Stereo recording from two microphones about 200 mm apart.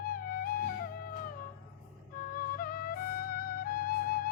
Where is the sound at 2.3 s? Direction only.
45° left (ahead or behind).